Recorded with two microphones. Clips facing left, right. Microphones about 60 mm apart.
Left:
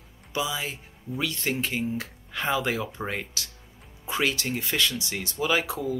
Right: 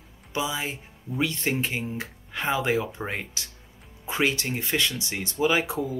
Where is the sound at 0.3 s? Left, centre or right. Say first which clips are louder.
Right 1 dB; right.